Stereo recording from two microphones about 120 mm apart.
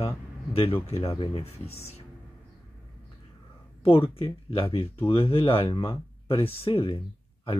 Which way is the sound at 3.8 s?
50° left (ahead or behind).